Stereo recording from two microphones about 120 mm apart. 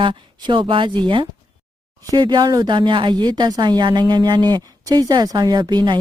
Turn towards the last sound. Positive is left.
turn(degrees=-35)  # may be behind; listen again after turning